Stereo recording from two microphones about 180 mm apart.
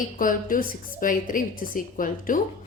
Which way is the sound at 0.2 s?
50° left (ahead or behind).